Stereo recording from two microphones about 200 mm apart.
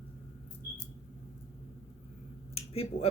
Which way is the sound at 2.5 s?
30° left (ahead or behind).